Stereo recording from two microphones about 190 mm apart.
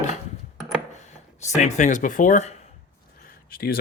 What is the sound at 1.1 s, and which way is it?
Speech, 35° left (ahead or behind).